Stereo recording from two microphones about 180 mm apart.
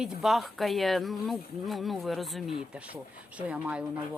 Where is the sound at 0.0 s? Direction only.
Centre (ahead or behind).